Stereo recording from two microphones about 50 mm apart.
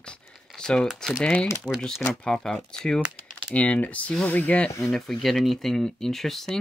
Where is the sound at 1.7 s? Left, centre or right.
Centre.